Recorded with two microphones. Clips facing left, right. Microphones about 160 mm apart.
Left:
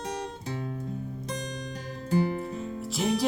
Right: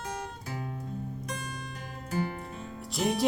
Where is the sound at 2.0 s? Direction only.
30° left (ahead or behind).